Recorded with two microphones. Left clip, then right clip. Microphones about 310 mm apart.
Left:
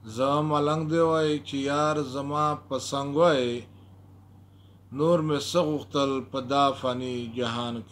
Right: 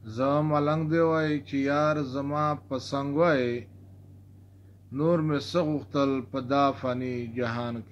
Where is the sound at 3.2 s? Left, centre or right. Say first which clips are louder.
Left 2 dB; left.